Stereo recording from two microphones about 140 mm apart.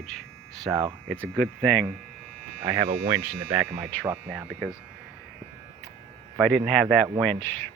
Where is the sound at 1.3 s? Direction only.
5° left (ahead or behind).